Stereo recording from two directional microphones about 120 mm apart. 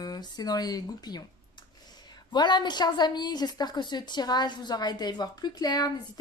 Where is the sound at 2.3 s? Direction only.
40° left (ahead or behind).